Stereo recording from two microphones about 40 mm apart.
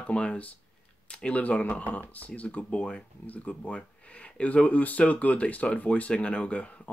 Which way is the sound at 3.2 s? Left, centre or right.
Left.